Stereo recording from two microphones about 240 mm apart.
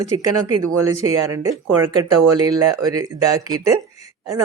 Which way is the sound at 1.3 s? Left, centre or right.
Centre.